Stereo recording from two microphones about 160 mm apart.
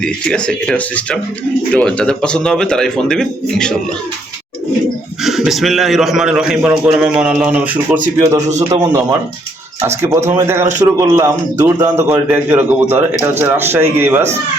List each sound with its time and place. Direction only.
0.0 s a man's voice: 5° left (ahead or behind)
5.2 s a man's voice: centre (ahead or behind)
8.4 s a man's voice: 45° right (ahead or behind)
8.7 s a man's voice: 25° right (ahead or behind)